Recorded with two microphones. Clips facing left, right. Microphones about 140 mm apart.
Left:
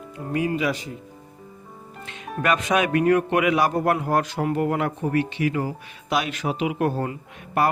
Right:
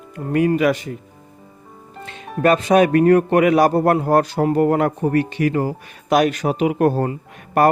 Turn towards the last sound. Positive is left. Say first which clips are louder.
# right 7 dB
turn(degrees=-45)  # may be behind; listen again after turning